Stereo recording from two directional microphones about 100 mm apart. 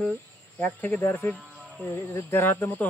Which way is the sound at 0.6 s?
15° left (ahead or behind).